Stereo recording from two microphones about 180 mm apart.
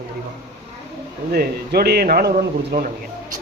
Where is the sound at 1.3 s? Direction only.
60° right (ahead or behind).